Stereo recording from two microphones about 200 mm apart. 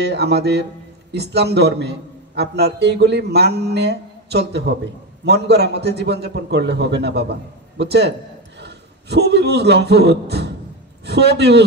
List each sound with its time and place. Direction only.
0.0 s a man's voice: 55° right (ahead or behind)
8.5 s a sound: 55° right (ahead or behind)
11.1 s a man's voice: 55° right (ahead or behind)